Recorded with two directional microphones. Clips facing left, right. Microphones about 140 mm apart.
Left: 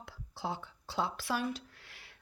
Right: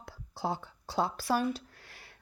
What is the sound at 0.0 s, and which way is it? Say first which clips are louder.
A woman's voice: right 4 dB; 40° right (ahead or behind).